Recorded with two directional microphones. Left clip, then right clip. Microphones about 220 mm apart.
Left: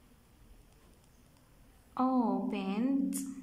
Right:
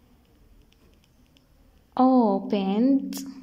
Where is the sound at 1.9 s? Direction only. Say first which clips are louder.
Right 11 dB; 25° right (ahead or behind).